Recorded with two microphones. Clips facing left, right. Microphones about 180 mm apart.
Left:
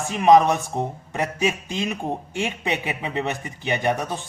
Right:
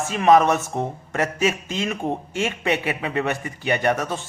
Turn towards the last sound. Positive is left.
turn(degrees=15)  # may be behind; listen again after turning